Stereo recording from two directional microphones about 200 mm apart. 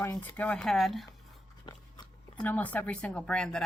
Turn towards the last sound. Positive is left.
turn(degrees=5)  # may be behind; listen again after turning